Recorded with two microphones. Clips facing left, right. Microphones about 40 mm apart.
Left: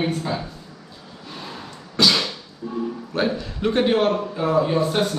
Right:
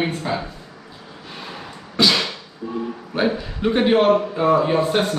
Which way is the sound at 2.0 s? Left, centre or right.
Centre.